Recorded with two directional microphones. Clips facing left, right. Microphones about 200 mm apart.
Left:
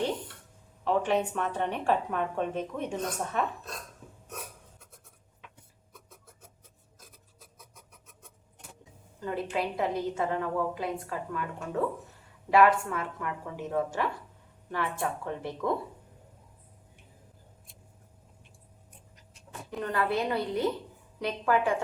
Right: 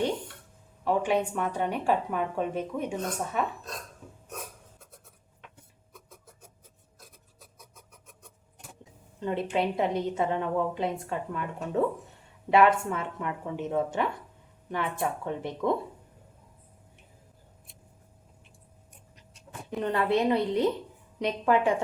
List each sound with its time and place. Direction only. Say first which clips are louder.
0.9 s a woman's voice: right 1 dB; 10° right (ahead or behind)
9.2 s a woman's voice: right 3 dB; 25° right (ahead or behind)
19.8 s a woman's voice: right 4 dB; 25° right (ahead or behind)